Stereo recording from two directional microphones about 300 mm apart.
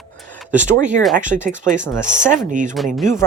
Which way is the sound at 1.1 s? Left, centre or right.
Right.